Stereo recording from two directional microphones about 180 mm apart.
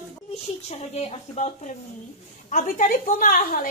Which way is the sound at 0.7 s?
35° left (ahead or behind).